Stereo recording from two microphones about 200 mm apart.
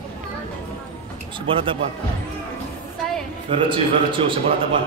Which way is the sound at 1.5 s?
25° right (ahead or behind).